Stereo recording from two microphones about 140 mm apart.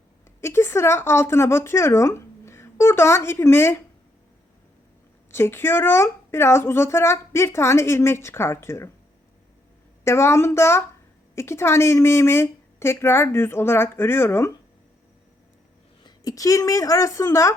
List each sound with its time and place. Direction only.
0.4 s speech: 20° left (ahead or behind)
5.3 s speech: 15° left (ahead or behind)
10.0 s a woman's voice: 20° left (ahead or behind)
16.0 s speech: 25° left (ahead or behind)